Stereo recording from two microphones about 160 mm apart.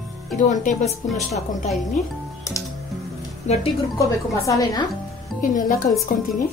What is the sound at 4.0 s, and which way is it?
Speech, 20° left (ahead or behind).